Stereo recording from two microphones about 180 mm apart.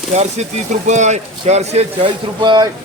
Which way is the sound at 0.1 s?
35° right (ahead or behind).